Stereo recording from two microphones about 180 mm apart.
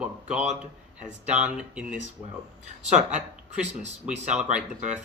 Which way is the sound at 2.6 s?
40° right (ahead or behind).